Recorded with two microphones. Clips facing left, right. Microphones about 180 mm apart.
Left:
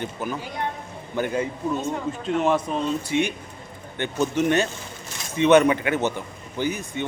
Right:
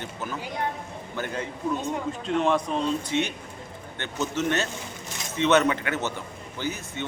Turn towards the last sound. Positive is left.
turn(degrees=15)  # may be behind; listen again after turning